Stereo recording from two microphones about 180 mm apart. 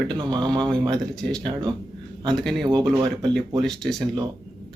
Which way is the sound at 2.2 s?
Centre (ahead or behind).